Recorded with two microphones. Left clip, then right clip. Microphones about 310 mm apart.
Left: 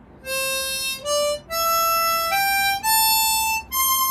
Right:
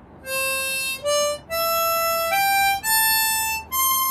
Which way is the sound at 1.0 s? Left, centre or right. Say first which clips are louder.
Even; centre.